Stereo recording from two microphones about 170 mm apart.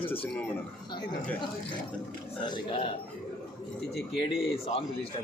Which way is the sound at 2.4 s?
30° left (ahead or behind).